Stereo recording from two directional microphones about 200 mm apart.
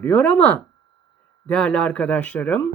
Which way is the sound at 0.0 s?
5° left (ahead or behind).